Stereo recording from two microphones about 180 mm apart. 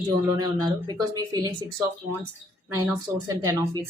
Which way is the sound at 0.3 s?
20° right (ahead or behind).